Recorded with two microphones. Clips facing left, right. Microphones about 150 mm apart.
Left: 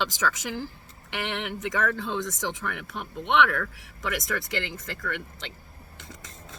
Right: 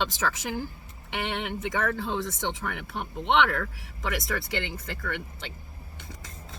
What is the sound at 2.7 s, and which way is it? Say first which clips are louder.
Speech: even; centre (ahead or behind).